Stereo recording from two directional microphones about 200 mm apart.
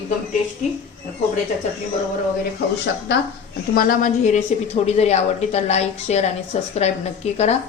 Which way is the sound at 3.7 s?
45° left (ahead or behind).